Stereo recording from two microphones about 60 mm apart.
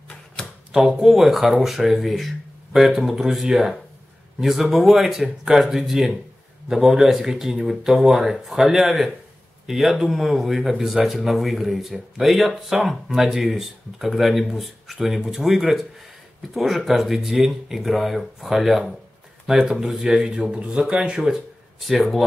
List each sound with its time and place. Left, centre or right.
0.7 s speech: centre
21.8 s speech: centre